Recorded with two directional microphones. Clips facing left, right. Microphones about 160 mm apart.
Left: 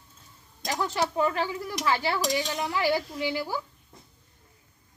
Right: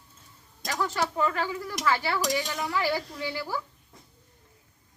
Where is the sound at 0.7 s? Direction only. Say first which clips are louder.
Left 1 dB; 20° left (ahead or behind).